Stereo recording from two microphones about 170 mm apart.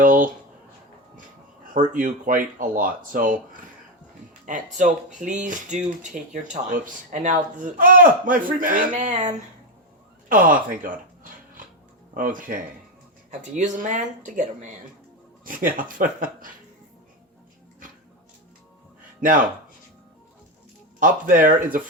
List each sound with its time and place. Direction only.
0.0 s speech: 50° right (ahead or behind)
1.6 s speech: 50° right (ahead or behind)
4.4 s speech: 50° right (ahead or behind)
10.2 s a sound: 55° right (ahead or behind)
12.1 s speech: 50° right (ahead or behind)
19.2 s speech: 50° right (ahead or behind)
21.0 s speech: 55° right (ahead or behind)